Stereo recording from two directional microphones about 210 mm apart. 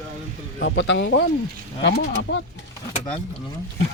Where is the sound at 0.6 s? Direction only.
60° left (ahead or behind).